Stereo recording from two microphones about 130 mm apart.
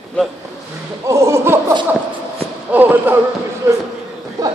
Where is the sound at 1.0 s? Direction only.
20° right (ahead or behind).